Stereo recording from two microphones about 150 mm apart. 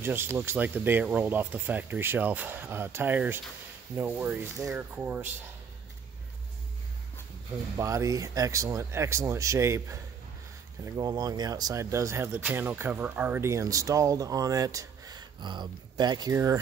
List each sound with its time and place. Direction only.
0.0 s speech: 15° right (ahead or behind)
7.7 s speech: 20° right (ahead or behind)